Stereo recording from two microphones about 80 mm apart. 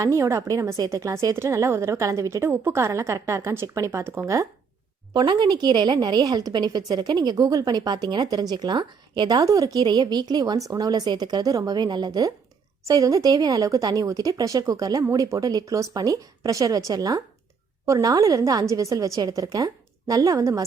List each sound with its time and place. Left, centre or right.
0.0 s a woman's voice: right
5.1 s a woman's voice: right
9.4 s a woman's voice: right
12.8 s a woman's voice: right